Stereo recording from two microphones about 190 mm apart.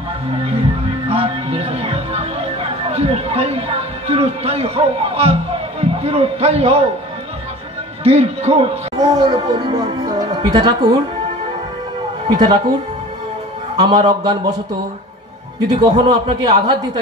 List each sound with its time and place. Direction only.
1.0 s music: 30° right (ahead or behind)
8.0 s speech: 35° right (ahead or behind)
8.9 s speech: 20° right (ahead or behind)
12.3 s speech: 25° right (ahead or behind)
13.7 s speech: 25° right (ahead or behind)
15.6 s speech: 25° right (ahead or behind)